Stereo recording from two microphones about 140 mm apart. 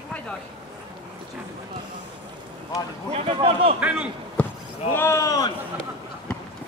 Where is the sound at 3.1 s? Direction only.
40° right (ahead or behind).